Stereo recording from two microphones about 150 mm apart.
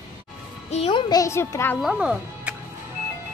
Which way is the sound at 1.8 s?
5° right (ahead or behind).